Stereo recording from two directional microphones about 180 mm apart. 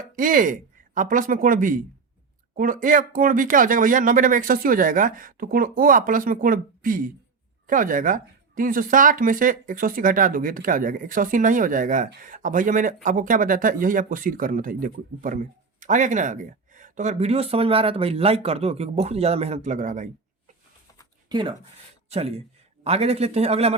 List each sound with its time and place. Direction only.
0.2 s speech: 50° right (ahead or behind)
21.2 s a man's voice: 25° right (ahead or behind)